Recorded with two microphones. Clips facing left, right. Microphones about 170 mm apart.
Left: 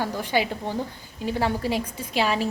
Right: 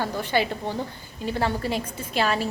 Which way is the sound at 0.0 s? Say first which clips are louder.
Even; 10° left (ahead or behind).